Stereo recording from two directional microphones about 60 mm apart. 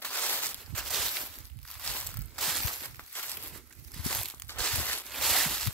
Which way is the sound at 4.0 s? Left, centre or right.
Centre.